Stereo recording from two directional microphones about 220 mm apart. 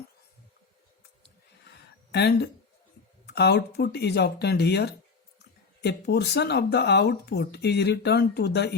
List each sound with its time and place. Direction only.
2.1 s speech: 45° left (ahead or behind)